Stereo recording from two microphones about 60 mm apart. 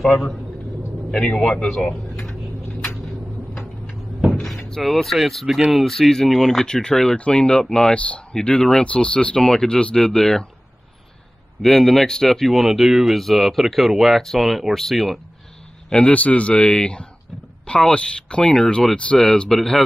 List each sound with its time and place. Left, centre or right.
0.0 s speech: centre
4.3 s door: centre
4.6 s speech: centre
11.6 s speech: centre
15.9 s speech: centre